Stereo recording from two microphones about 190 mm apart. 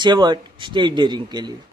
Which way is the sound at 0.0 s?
25° right (ahead or behind).